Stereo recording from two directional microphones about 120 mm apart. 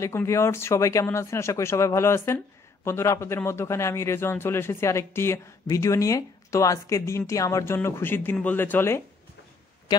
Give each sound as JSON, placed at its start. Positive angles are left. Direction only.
{"t": 0.0, "sound": "speech", "side_deg": 25}